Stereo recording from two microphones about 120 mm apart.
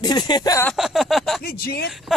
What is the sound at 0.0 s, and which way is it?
Speech, 35° left (ahead or behind).